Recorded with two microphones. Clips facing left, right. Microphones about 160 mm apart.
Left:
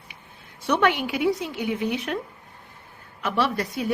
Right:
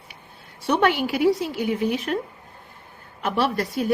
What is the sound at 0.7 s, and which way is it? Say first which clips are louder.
A woman's voice: right 2 dB; 40° right (ahead or behind).